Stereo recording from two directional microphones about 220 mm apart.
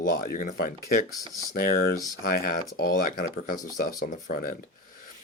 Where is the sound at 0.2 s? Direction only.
40° left (ahead or behind).